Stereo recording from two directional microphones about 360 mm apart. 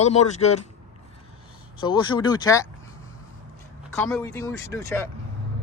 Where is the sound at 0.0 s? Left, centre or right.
Centre.